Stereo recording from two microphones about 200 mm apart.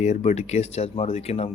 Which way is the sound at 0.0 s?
35° left (ahead or behind).